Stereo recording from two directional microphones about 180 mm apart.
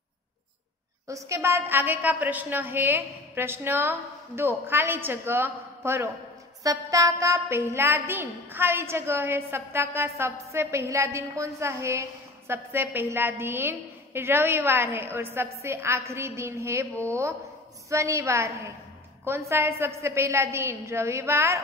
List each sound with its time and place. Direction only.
1.0 s a woman's voice: 15° right (ahead or behind)